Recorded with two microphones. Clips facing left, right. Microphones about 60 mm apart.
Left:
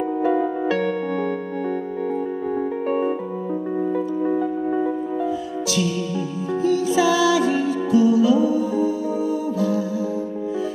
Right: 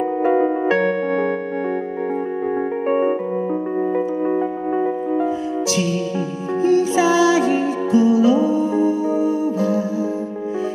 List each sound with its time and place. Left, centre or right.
0.2 s music: right
2.9 s music: right
6.6 s music: right